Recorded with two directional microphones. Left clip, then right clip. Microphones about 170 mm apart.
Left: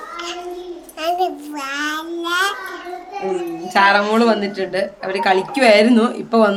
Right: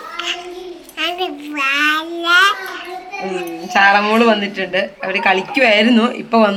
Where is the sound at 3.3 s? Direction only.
10° right (ahead or behind).